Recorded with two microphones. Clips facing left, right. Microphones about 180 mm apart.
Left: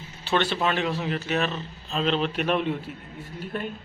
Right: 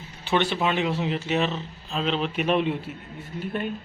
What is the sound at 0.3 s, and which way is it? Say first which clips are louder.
Speech: right 1 dB; 15° right (ahead or behind).